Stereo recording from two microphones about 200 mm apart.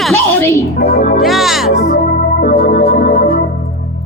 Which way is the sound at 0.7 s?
50° left (ahead or behind).